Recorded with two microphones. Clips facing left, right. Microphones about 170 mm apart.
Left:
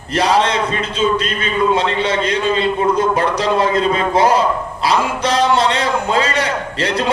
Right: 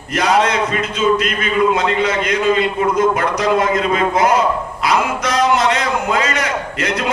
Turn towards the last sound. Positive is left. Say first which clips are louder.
# left 1 dB
turn(degrees=30)  # may be behind; listen again after turning